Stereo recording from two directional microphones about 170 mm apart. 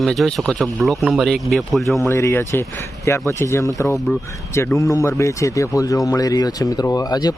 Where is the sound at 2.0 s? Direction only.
15° left (ahead or behind).